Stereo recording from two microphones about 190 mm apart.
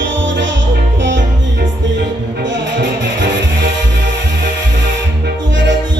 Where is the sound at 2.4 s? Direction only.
75° right (ahead or behind).